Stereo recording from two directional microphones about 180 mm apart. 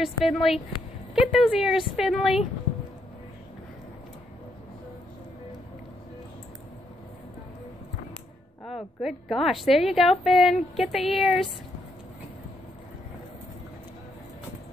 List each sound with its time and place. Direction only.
0.0 s a woman's voice: centre (ahead or behind)
8.6 s a woman's voice: centre (ahead or behind)